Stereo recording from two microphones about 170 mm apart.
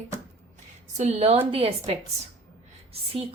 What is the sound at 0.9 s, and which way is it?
A woman's voice, 40° right (ahead or behind).